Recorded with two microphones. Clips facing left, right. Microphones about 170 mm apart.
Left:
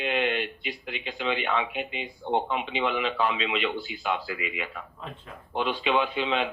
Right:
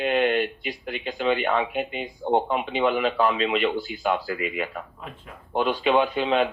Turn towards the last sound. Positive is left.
turn(degrees=-45)  # may be behind; listen again after turning